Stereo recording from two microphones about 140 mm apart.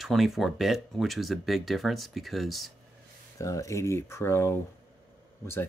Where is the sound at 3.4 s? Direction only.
25° left (ahead or behind).